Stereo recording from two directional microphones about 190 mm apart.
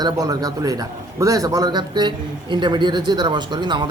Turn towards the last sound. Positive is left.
turn(degrees=-25)  # may be behind; listen again after turning